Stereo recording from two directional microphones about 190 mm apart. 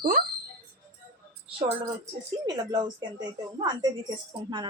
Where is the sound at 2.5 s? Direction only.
20° right (ahead or behind).